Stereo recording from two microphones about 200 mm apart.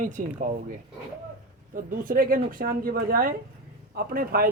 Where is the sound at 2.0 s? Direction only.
45° right (ahead or behind).